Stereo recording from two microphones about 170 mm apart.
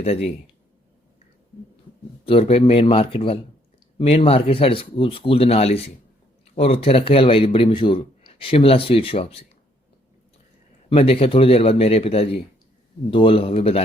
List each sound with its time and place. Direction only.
0.0 s a man's voice: 40° left (ahead or behind)
2.2 s a man's voice: 35° left (ahead or behind)
10.8 s a man's voice: 35° left (ahead or behind)